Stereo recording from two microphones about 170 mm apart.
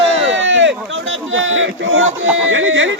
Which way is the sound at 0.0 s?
90° right.